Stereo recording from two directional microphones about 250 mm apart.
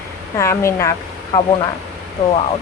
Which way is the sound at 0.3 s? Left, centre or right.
Centre.